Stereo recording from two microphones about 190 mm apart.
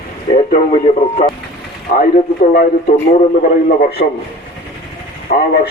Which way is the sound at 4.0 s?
40° left (ahead or behind).